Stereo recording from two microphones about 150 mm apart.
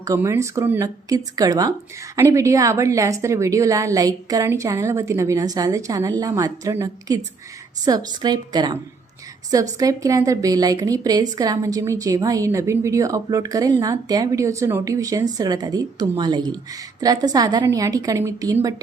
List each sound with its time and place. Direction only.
0.0 s a woman's voice: 20° right (ahead or behind)